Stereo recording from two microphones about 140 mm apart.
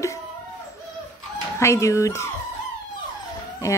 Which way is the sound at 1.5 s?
20° left (ahead or behind).